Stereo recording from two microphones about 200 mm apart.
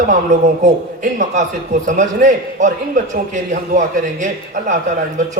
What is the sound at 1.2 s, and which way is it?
A man's voice, 35° right (ahead or behind).